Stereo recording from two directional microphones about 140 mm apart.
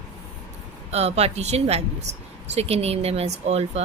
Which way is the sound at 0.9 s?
50° right (ahead or behind).